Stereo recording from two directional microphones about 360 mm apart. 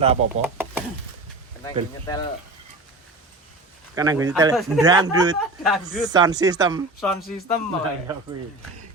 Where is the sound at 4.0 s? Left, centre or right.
Centre.